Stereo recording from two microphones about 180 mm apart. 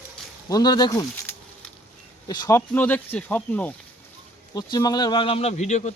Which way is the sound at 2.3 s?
20° left (ahead or behind).